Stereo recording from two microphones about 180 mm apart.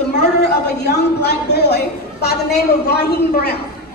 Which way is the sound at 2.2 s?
65° left (ahead or behind).